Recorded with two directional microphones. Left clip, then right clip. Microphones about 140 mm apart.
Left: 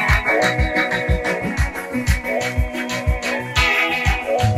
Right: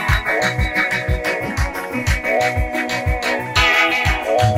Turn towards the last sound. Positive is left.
turn(degrees=-35)  # may be behind; listen again after turning